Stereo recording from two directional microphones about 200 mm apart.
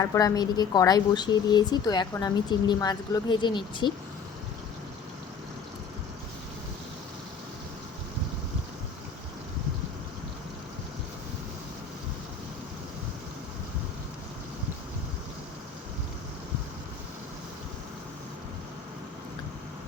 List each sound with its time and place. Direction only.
0.0 s a woman's voice: 15° left (ahead or behind)